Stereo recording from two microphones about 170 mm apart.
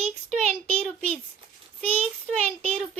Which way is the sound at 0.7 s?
10° left (ahead or behind).